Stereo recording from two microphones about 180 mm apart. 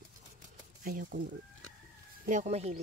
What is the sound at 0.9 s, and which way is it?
Speech, 50° right (ahead or behind).